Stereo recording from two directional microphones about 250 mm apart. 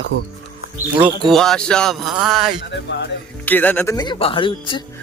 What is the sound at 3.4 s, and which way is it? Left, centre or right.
Speech, centre.